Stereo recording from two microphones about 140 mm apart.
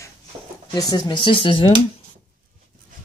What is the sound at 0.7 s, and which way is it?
Speech, 30° left (ahead or behind).